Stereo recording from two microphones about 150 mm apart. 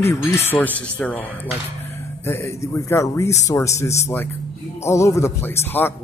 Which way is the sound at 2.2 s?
20° left (ahead or behind).